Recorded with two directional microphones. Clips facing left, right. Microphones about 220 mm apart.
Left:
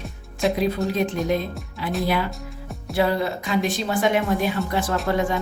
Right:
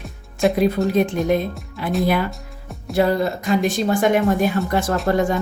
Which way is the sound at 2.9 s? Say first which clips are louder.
Right 3 dB; 45° right (ahead or behind).